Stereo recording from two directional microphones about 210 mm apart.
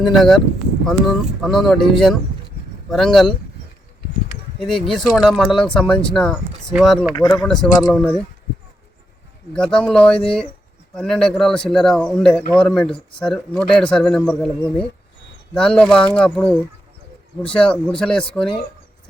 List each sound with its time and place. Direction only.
0.0 s speech: centre (ahead or behind)
4.6 s speech: centre (ahead or behind)
7.1 s speech: 20° left (ahead or behind)
7.4 s speech: 5° left (ahead or behind)
9.6 s speech: 5° left (ahead or behind)